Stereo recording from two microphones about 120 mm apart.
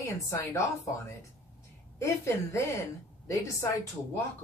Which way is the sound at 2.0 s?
25° left (ahead or behind).